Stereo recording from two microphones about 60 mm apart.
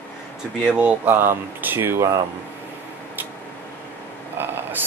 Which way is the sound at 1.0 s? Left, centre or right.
Right.